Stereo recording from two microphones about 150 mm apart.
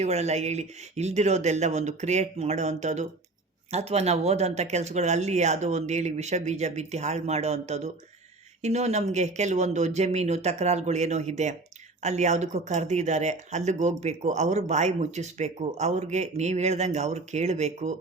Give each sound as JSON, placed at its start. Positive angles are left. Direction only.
{"t": 0.0, "sound": "speech", "side_deg": -45}